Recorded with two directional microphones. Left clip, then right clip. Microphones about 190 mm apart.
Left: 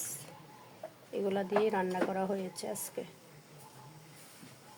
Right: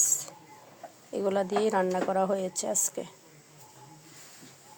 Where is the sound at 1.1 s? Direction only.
30° right (ahead or behind).